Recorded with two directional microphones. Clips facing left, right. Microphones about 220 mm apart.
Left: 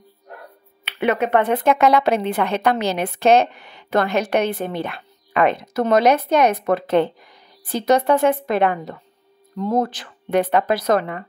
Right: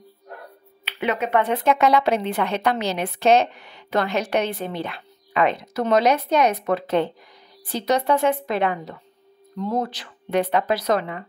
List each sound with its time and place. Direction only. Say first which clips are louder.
0.9 s speech: left 4 dB; 55° left (ahead or behind)